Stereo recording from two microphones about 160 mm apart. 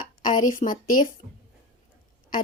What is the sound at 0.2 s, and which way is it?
Speech, 55° left (ahead or behind).